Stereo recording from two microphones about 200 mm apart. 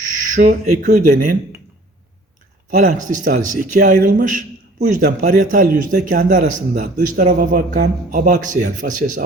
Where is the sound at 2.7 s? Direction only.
40° right (ahead or behind).